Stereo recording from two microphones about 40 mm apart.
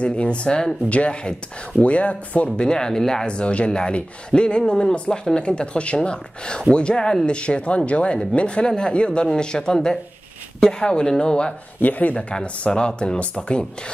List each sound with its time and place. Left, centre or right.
0.0 s speech: left
0.8 s speech: left
2.6 s speech: centre
3.3 s speech: left
11.8 s speech: left
12.2 s speech: left